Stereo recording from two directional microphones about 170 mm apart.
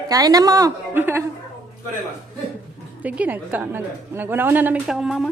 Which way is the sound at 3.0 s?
10° right (ahead or behind).